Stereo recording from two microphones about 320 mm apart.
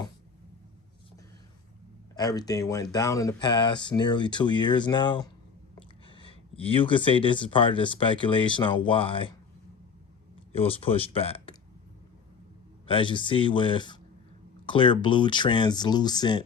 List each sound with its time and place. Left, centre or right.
2.1 s speech: centre
10.5 s speech: centre
12.9 s speech: centre